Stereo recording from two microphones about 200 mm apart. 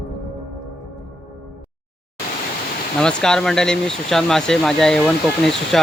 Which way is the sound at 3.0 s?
5° left (ahead or behind).